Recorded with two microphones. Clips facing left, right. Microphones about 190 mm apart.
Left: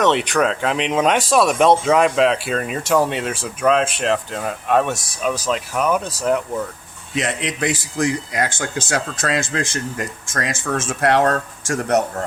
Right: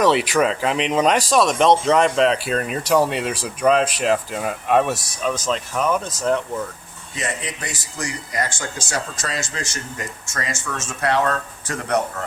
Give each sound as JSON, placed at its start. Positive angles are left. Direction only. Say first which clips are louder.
{"t": 0.0, "sound": "speech", "louder": "even", "side_deg": -5}
{"t": 7.1, "sound": "speech", "louder": "left 5 dB", "side_deg": 80}